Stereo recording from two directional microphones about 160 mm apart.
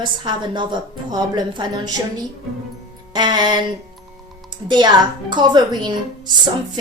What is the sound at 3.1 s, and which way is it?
A woman's voice, 25° right (ahead or behind).